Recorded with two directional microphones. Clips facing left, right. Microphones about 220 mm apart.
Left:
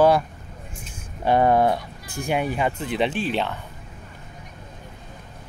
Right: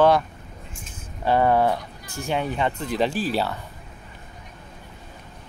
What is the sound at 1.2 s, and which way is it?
Speech, 15° left (ahead or behind).